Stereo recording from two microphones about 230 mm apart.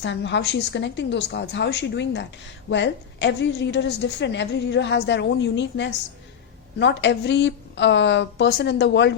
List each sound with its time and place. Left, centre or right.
0.0 s a woman's voice: left